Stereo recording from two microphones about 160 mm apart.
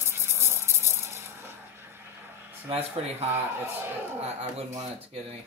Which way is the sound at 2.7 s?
40° right (ahead or behind).